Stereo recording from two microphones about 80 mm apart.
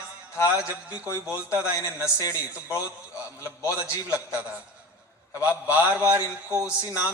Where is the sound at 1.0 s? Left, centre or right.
Left.